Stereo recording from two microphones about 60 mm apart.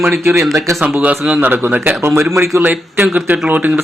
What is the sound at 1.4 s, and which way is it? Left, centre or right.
Speech, right.